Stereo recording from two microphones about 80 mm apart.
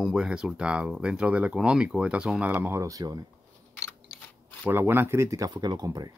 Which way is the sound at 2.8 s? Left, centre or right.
Right.